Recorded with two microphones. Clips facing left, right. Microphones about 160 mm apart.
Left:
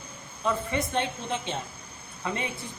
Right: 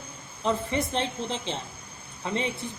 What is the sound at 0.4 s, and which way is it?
A woman's voice, 30° right (ahead or behind).